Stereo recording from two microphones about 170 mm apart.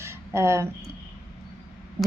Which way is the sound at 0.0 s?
15° right (ahead or behind).